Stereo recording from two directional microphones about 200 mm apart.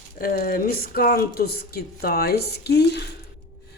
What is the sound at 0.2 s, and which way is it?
Speech, 45° left (ahead or behind).